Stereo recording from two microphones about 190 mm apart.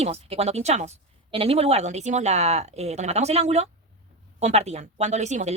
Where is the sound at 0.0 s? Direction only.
35° right (ahead or behind).